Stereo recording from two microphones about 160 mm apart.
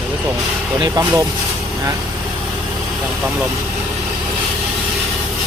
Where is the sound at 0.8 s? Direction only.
25° right (ahead or behind).